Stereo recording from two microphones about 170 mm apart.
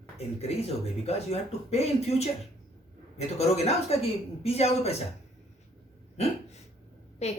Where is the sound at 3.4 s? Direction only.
40° left (ahead or behind).